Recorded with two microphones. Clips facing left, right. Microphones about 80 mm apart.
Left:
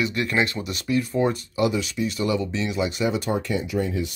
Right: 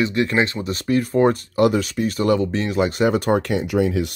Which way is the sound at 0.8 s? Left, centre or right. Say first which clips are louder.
Right 5 dB; right.